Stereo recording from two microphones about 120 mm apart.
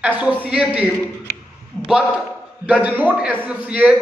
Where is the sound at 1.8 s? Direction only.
10° right (ahead or behind).